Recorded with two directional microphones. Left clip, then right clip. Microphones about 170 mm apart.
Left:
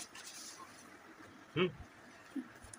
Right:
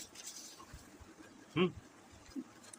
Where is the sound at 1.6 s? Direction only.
45° right (ahead or behind).